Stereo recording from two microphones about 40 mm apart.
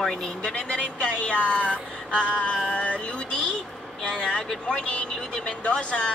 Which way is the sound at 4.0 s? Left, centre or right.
Left.